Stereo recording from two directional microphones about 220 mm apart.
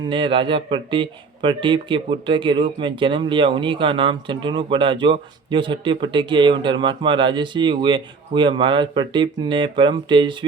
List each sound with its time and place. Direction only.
0.1 s speech: 25° right (ahead or behind)